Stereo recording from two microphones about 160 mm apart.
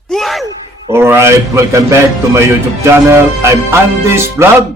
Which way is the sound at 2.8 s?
15° right (ahead or behind).